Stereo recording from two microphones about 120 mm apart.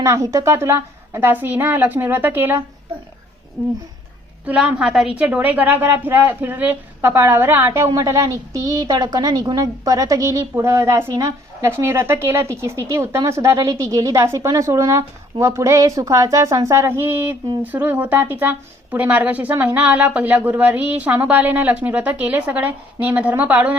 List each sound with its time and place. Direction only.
0.0 s speech: 25° right (ahead or behind)
4.4 s a woman's voice: 10° right (ahead or behind)